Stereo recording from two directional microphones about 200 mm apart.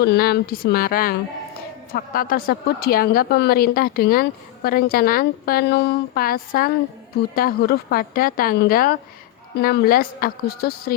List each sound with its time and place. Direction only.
0.0 s a woman's voice: 50° left (ahead or behind)